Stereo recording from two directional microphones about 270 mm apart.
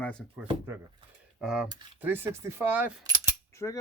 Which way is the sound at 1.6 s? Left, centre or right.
Centre.